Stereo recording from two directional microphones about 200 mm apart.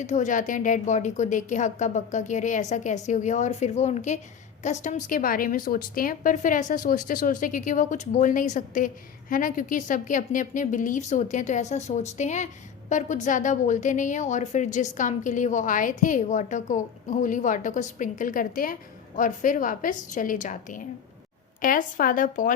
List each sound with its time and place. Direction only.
0.0 s a woman's voice: 35° left (ahead or behind)